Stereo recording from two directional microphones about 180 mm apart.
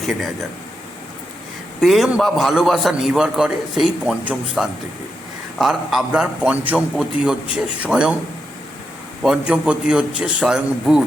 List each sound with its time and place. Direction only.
1.8 s a man's voice: centre (ahead or behind)
9.2 s a man's voice: 5° right (ahead or behind)